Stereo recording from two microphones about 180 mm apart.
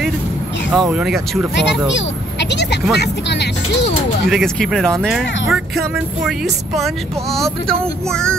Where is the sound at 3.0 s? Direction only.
70° left (ahead or behind).